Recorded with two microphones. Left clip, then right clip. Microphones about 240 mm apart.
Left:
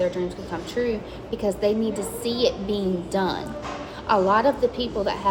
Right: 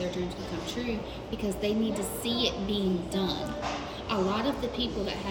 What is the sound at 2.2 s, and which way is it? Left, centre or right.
A woman's voice, left.